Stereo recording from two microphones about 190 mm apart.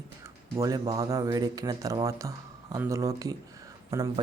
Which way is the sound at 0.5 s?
15° right (ahead or behind).